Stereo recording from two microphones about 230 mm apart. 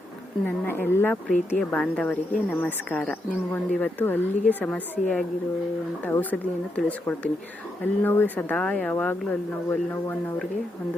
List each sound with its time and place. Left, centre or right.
0.4 s speech: centre